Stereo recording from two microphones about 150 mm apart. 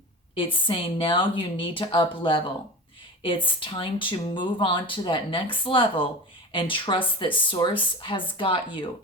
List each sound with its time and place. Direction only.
0.3 s speech: 35° left (ahead or behind)